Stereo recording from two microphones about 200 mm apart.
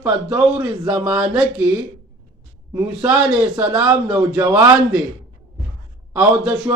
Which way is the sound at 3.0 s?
10° right (ahead or behind).